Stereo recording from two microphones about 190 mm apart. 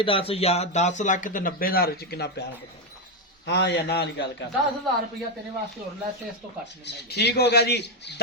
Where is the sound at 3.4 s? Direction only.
65° left (ahead or behind).